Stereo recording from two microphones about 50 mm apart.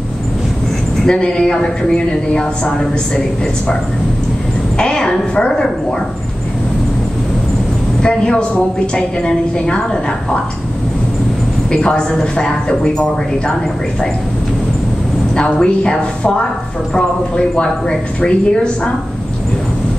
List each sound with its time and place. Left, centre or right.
1.0 s a woman's voice: centre
4.7 s a woman's voice: centre
8.0 s a woman's voice: centre
11.7 s a woman's voice: centre
15.3 s a woman's voice: centre